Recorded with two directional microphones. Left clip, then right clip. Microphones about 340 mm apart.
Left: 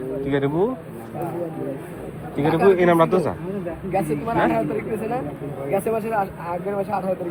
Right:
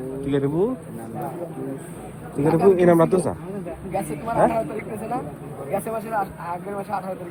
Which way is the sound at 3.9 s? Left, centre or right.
Left.